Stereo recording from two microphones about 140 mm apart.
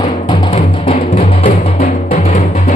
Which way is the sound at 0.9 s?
70° left (ahead or behind).